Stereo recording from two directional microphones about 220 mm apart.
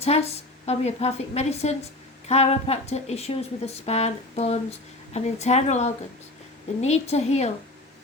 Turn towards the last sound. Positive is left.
turn(degrees=30)  # may be behind; listen again after turning